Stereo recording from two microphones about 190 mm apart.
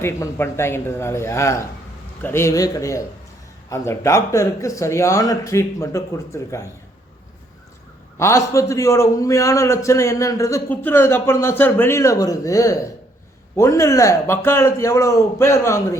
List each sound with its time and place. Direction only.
0.0 s a man's voice: 10° left (ahead or behind)
8.2 s a man's voice: 15° left (ahead or behind)